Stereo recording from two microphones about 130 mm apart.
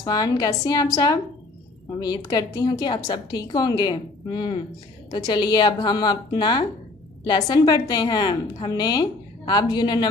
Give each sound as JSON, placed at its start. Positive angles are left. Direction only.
{"t": 0.0, "sound": "a woman's voice", "side_deg": 30}